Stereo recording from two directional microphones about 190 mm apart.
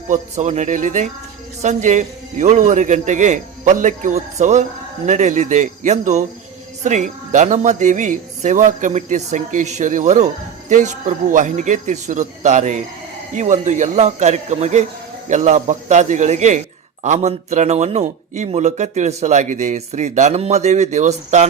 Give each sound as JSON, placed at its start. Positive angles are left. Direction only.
{"t": 0.1, "sound": "speech", "side_deg": -40}